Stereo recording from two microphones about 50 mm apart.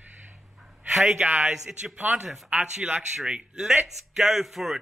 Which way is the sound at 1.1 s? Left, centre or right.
Right.